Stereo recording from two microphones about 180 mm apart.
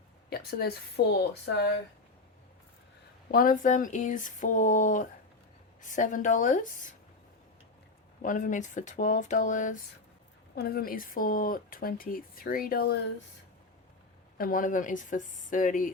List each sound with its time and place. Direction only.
0.3 s a woman's voice: 60° left (ahead or behind)
3.3 s speech: 50° left (ahead or behind)
8.2 s speech: 45° left (ahead or behind)
10.5 s speech: 60° left (ahead or behind)
14.3 s speech: 50° left (ahead or behind)